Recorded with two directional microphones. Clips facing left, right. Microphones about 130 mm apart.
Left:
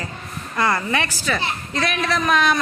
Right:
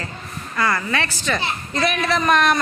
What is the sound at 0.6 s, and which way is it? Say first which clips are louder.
Speech: left 1 dB; 20° left (ahead or behind).